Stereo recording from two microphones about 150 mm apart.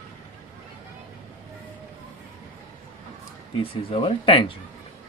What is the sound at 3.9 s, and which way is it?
Speech, 40° left (ahead or behind).